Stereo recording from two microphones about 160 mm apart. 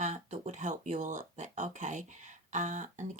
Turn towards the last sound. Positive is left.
turn(degrees=-50)  # may be behind; listen again after turning